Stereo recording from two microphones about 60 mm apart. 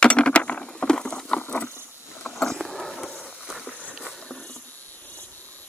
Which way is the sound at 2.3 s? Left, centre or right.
Centre.